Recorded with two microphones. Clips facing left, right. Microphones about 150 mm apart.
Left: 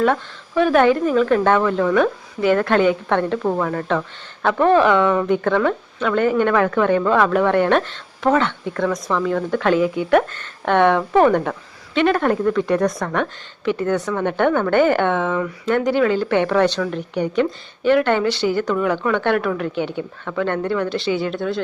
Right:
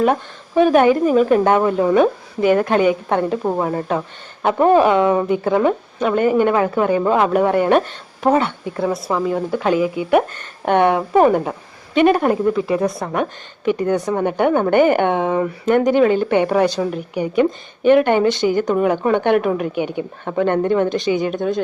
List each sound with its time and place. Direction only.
0.0 s a woman's voice: 15° right (ahead or behind)
13.1 s a woman's voice: 15° right (ahead or behind)